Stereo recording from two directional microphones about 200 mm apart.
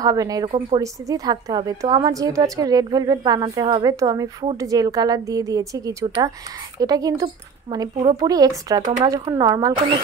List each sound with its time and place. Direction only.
0.0 s a woman's voice: 20° right (ahead or behind)